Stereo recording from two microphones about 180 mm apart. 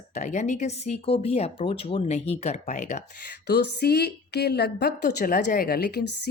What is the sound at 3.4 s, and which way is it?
Speech, 65° left (ahead or behind).